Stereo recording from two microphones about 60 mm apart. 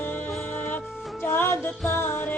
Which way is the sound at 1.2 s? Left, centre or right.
Left.